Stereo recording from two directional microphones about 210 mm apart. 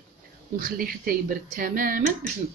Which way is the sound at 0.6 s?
45° right (ahead or behind).